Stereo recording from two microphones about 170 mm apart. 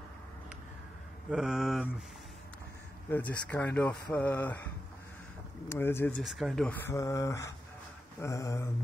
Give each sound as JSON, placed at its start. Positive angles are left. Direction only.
{"t": 1.3, "sound": "speech", "side_deg": -5}
{"t": 3.1, "sound": "speech", "side_deg": 10}
{"t": 5.7, "sound": "speech", "side_deg": 15}
{"t": 6.1, "sound": "speech", "side_deg": 0}
{"t": 8.2, "sound": "a sound", "side_deg": 20}